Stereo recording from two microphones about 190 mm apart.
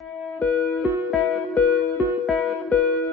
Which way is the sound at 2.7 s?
10° left (ahead or behind).